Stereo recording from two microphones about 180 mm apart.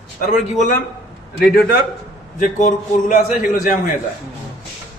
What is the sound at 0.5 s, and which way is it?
Speech, 45° left (ahead or behind).